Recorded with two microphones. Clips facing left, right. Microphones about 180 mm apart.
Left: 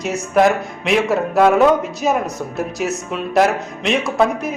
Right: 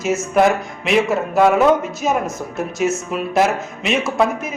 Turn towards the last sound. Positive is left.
turn(degrees=0)  # may be behind; listen again after turning